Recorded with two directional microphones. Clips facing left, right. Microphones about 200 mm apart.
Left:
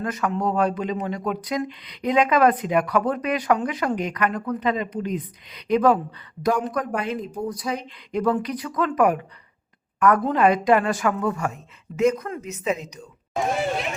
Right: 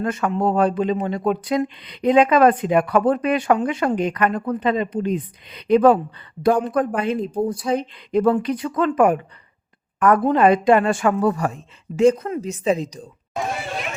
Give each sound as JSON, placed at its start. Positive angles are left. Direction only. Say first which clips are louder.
{"t": 0.0, "sound": "a woman's voice", "louder": "right 4 dB", "side_deg": -30}